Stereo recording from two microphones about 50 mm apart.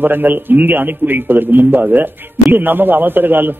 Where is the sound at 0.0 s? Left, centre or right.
Right.